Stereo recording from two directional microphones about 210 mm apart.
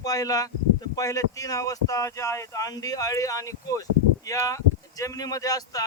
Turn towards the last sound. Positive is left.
turn(degrees=15)  # may be behind; listen again after turning